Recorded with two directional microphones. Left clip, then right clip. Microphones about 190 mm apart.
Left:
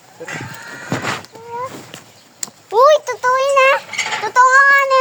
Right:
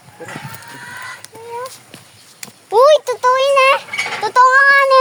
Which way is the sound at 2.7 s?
15° right (ahead or behind).